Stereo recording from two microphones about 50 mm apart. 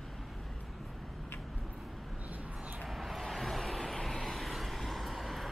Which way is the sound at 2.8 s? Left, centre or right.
Centre.